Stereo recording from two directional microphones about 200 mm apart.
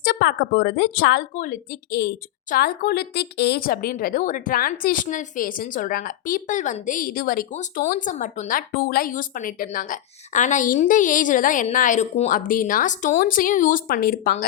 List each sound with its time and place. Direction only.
0.0 s speech: 55° left (ahead or behind)